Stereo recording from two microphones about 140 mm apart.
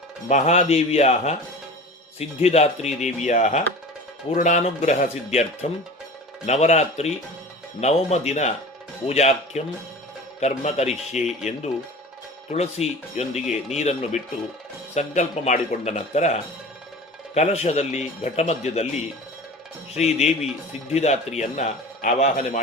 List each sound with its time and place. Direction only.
0.3 s speech: 55° left (ahead or behind)
12.5 s speech: 50° left (ahead or behind)
20.0 s speech: 50° left (ahead or behind)